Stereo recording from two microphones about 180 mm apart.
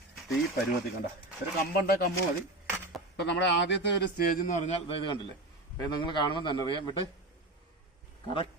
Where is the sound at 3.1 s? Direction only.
75° left (ahead or behind); by 6.8 s 25° left (ahead or behind).